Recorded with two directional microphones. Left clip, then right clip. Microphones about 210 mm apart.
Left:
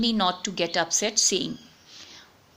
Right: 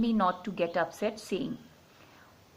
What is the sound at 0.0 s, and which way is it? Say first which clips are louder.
Speech: left 4 dB; 40° left (ahead or behind).